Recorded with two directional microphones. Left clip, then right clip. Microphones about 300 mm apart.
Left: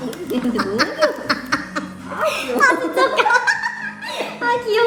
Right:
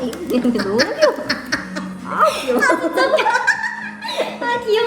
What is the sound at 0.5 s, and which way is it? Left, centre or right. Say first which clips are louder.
Speech: even; centre.